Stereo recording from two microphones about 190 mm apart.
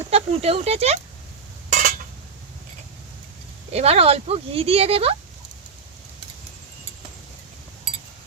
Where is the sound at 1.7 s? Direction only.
50° right (ahead or behind).